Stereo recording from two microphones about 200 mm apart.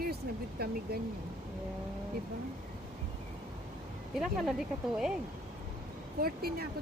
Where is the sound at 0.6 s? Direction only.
50° right (ahead or behind).